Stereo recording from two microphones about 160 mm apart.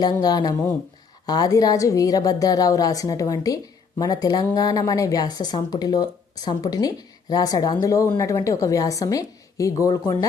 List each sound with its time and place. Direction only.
0.0 s speech: 25° left (ahead or behind)